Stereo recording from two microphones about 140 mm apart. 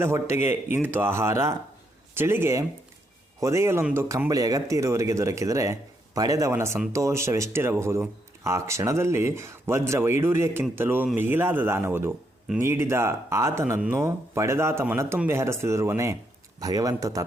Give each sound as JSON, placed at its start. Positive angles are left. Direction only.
{"t": 0.0, "sound": "speech", "side_deg": -20}